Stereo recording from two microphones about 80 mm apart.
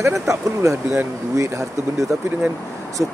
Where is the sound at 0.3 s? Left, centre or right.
Right.